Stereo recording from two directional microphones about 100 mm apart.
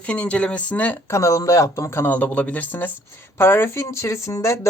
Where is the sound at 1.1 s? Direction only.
30° left (ahead or behind).